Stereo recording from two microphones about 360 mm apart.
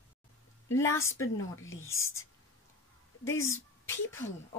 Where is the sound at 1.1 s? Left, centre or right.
Left.